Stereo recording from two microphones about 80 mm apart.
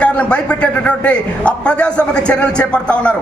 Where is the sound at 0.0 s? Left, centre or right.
Centre.